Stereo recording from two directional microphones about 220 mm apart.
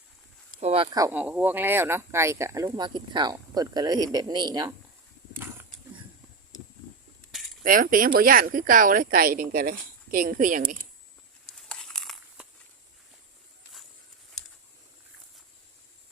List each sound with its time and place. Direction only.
0.6 s speech: 25° right (ahead or behind)
7.6 s speech: 40° right (ahead or behind)
11.5 s crumpling: 5° left (ahead or behind)